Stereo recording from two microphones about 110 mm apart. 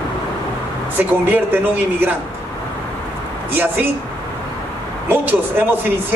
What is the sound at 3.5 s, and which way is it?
Speech, 15° right (ahead or behind).